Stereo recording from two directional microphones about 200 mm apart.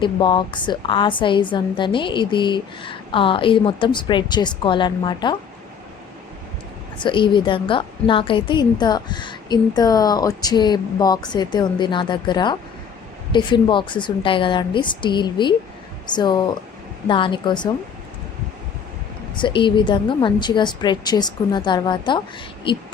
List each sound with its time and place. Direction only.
0.0 s a woman's voice: 25° left (ahead or behind)
7.0 s a woman's voice: 25° left (ahead or behind)
19.4 s a woman's voice: 25° left (ahead or behind)